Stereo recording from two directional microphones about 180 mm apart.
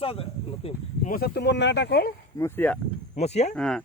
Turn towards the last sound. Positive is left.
turn(degrees=5)  # may be behind; listen again after turning